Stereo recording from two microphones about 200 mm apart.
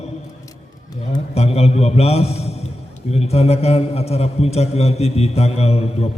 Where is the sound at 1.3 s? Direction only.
30° left (ahead or behind).